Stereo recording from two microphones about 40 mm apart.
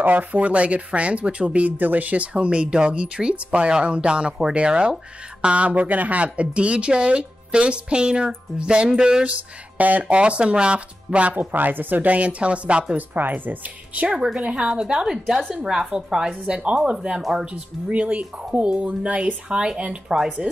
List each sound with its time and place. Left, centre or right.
0.0 s speech: right
1.8 s speech: right
2.3 s speech: right
5.7 s speech: right; by 9.2 s centre
9.8 s speech: right
10.0 s speech: right
11.1 s speech: right
11.3 s speech: right
12.9 s speech: right
14.0 s speech: right
17.2 s speech: centre
17.5 s speech: right
19.5 s speech: right